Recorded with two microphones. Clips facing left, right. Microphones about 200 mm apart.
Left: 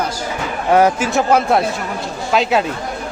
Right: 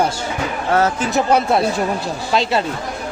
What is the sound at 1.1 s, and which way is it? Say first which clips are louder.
Speech: left 1 dB; centre (ahead or behind).